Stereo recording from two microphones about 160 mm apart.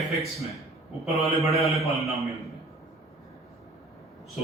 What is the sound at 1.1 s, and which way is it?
A man's voice, centre (ahead or behind).